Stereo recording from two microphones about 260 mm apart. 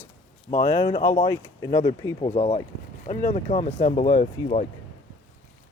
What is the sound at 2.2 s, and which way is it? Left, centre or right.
Speech, left.